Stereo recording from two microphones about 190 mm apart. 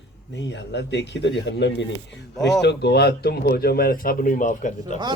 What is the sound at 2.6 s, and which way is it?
Speech, 65° left (ahead or behind).